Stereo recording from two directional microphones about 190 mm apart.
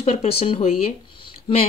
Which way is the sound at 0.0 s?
35° left (ahead or behind).